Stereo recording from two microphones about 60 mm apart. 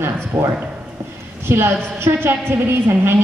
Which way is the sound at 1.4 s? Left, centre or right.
Right.